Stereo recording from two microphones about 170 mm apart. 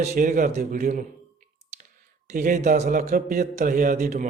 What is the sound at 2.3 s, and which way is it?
Speech, 50° right (ahead or behind).